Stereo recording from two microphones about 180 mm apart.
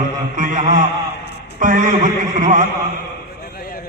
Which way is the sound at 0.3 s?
45° right (ahead or behind).